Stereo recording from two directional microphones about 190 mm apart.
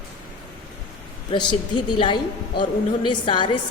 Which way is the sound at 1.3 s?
25° left (ahead or behind).